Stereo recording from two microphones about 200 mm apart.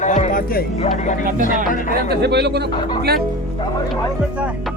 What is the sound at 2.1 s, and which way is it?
Speech, 55° right (ahead or behind).